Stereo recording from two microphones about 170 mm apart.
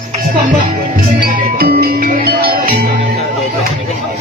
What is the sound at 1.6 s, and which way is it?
Music, 65° right (ahead or behind).